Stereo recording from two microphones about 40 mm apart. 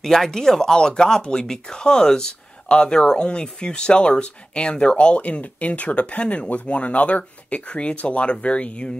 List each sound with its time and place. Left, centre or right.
0.0 s speech: centre; by 8.9 s left